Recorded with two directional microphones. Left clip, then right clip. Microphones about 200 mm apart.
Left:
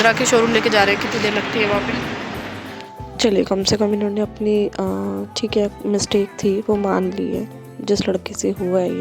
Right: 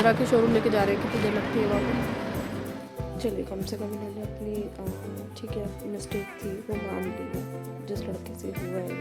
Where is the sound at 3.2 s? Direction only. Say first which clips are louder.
Left 15 dB; 45° left (ahead or behind).